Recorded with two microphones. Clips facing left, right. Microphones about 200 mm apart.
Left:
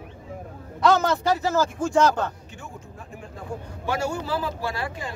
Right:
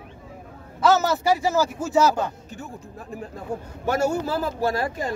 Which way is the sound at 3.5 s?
40° right (ahead or behind).